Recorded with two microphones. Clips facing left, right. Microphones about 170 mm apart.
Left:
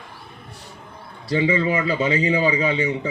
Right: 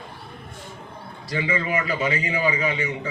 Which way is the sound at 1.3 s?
30° left (ahead or behind).